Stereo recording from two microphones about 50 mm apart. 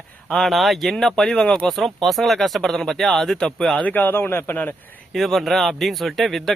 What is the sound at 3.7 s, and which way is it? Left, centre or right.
Speech, left.